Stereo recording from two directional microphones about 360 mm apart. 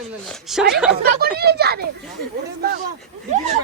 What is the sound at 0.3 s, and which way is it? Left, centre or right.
Speech, centre.